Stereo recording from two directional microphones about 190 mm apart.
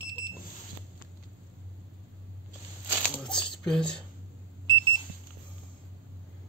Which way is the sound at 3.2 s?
5° left (ahead or behind).